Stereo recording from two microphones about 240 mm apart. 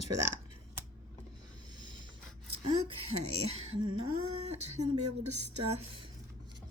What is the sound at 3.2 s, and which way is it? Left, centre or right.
Speech, right.